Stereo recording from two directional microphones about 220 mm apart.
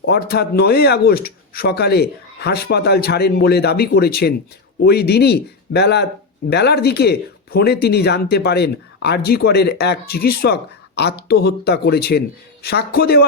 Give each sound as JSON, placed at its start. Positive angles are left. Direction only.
{"t": 0.0, "sound": "speech", "side_deg": 45}